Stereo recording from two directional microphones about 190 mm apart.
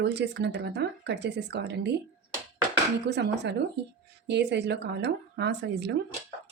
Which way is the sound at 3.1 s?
65° right (ahead or behind).